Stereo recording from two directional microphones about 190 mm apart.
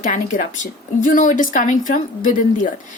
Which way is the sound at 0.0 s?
45° left (ahead or behind).